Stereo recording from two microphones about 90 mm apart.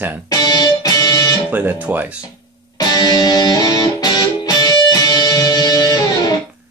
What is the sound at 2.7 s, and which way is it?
Music, 50° left (ahead or behind).